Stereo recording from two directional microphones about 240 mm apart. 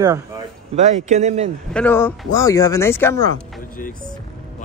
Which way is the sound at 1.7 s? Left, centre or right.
Centre.